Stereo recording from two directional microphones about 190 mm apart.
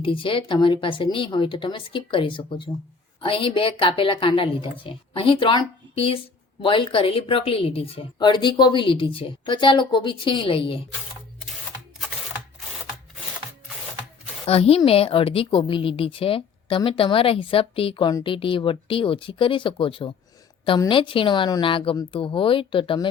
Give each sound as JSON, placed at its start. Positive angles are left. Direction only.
{"t": 0.0, "sound": "a woman's voice", "side_deg": 25}
{"t": 14.4, "sound": "a woman's voice", "side_deg": 30}